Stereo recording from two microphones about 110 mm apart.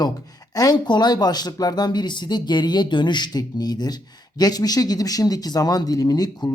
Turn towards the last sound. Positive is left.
turn(degrees=35)  # may be behind; listen again after turning